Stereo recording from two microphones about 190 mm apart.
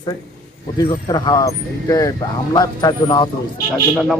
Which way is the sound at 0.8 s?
20° left (ahead or behind).